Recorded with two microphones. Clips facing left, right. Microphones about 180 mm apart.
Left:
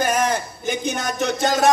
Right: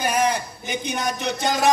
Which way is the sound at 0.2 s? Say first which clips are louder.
Left 1 dB; 45° left (ahead or behind).